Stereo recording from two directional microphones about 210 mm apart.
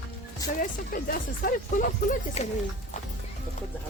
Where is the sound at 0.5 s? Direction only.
40° left (ahead or behind).